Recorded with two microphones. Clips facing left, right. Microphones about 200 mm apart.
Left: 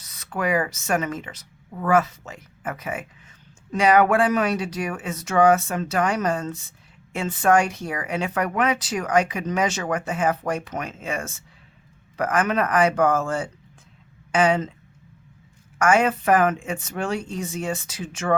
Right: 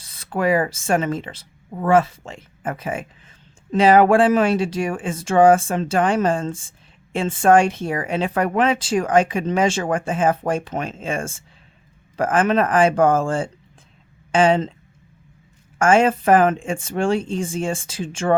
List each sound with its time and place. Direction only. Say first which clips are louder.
0.0 s speech: right 5 dB; 30° right (ahead or behind)
15.8 s speech: right 4 dB; 30° right (ahead or behind)